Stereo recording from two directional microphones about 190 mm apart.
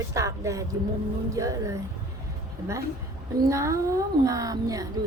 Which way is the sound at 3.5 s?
15° right (ahead or behind).